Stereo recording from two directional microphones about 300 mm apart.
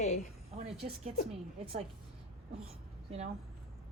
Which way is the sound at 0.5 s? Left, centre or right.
Centre.